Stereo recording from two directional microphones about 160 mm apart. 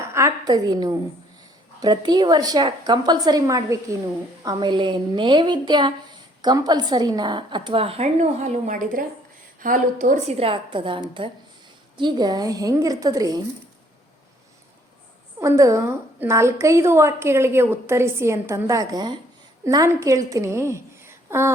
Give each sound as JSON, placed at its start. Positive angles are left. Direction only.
{"t": 0.1, "sound": "a woman's voice", "side_deg": -20}
{"t": 15.4, "sound": "a woman's voice", "side_deg": -20}